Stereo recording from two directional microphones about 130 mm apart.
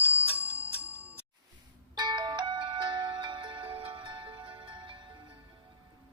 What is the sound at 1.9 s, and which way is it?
Music, 35° right (ahead or behind).